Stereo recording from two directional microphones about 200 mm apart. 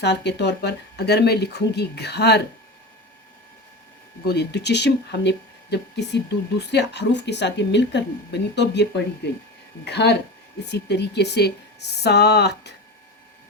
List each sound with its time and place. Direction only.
0.0 s speech: 60° left (ahead or behind)
4.2 s speech: 55° left (ahead or behind)